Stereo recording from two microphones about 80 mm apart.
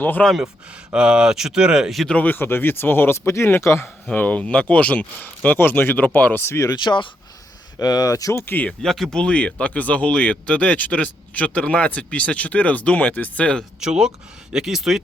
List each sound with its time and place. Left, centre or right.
0.0 s speech: left
0.3 s speech: centre
2.0 s speech: centre; by 3.8 s left
4.0 s speech: centre
6.4 s speech: left
6.7 s speech: left
7.8 s speech: left
8.8 s speech: centre
13.7 s speech: centre